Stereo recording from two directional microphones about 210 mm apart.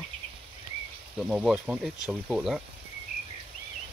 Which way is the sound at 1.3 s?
5° right (ahead or behind).